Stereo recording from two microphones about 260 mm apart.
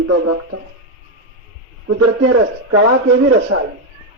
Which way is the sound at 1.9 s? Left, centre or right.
Right.